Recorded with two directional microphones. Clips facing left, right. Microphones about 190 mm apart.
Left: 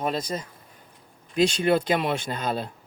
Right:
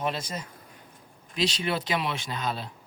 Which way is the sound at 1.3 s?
50° left (ahead or behind).